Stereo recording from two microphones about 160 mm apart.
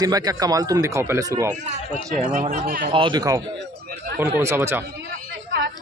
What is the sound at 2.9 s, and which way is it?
Speech, 30° right (ahead or behind).